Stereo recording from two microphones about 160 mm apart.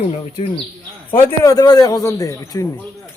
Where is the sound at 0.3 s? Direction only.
35° left (ahead or behind).